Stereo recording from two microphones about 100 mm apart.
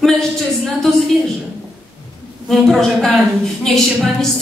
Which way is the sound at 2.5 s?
5° left (ahead or behind).